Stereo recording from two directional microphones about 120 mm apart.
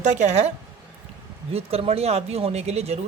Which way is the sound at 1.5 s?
55° right (ahead or behind).